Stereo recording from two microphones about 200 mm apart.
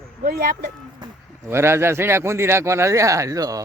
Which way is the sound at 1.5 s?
10° right (ahead or behind).